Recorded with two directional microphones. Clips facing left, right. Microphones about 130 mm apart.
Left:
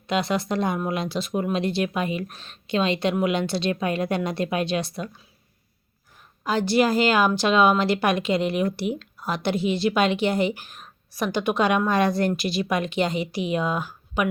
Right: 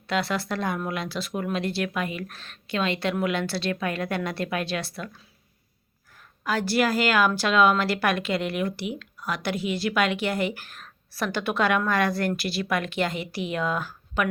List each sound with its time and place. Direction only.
0.1 s a woman's voice: 20° left (ahead or behind)
6.4 s a woman's voice: 25° left (ahead or behind)
8.7 s a woman's voice: 35° left (ahead or behind); by 14.3 s 15° left (ahead or behind)